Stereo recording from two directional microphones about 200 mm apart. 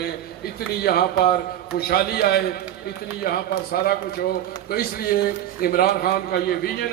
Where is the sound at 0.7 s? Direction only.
50° left (ahead or behind).